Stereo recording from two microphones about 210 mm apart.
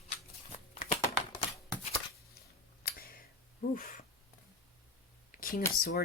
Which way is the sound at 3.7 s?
40° left (ahead or behind).